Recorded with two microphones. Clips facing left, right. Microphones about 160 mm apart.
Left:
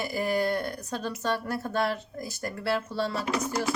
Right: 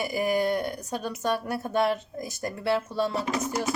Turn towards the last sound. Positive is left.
turn(degrees=-20)  # may be behind; listen again after turning